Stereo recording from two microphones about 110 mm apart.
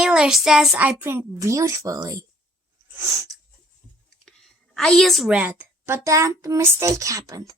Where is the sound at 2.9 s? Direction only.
30° right (ahead or behind).